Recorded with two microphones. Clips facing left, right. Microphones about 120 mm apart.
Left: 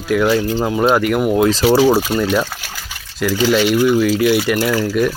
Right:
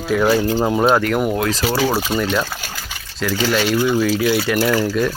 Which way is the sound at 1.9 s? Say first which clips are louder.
Left 5 dB; 5° left (ahead or behind).